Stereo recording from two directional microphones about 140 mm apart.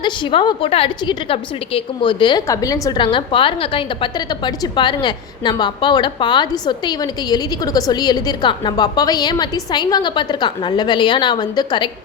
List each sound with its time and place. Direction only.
0.0 s a woman's voice: 35° left (ahead or behind)
2.5 s a woman's voice: 25° left (ahead or behind)